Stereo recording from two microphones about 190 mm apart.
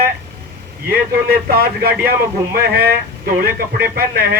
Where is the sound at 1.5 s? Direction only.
50° right (ahead or behind).